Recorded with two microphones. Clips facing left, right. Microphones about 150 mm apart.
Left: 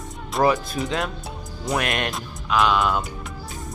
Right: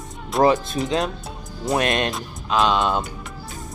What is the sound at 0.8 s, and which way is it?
Speech, 20° right (ahead or behind).